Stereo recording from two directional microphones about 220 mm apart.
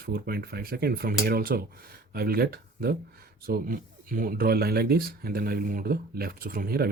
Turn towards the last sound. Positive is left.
turn(degrees=-40)  # may be behind; listen again after turning